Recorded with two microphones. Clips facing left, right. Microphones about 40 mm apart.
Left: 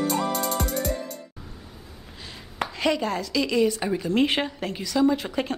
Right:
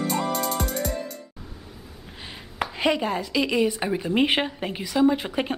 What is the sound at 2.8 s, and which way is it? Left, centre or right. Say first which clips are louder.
A woman's voice: right 1 dB; centre.